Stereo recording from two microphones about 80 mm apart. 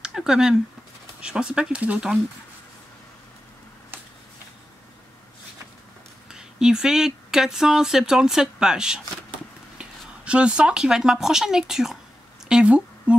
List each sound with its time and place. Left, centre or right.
0.0 s speech: centre
3.9 s a sound: right
6.3 s speech: centre